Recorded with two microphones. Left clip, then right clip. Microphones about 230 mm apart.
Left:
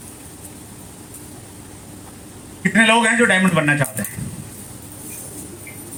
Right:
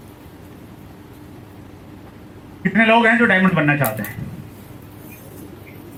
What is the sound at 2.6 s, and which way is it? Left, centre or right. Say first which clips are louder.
A man's voice: even; left.